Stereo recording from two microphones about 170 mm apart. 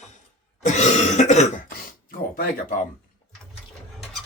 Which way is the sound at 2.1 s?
55° left (ahead or behind).